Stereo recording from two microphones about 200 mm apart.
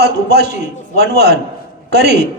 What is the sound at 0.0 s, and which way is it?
A man's voice, 55° right (ahead or behind).